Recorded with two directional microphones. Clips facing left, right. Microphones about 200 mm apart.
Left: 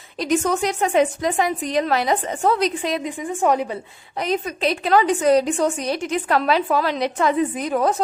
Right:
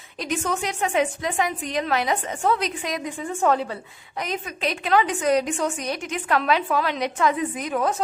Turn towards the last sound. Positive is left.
turn(degrees=35)  # may be behind; listen again after turning